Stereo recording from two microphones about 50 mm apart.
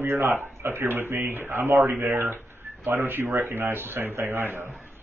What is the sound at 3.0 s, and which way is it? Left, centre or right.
Speech, right.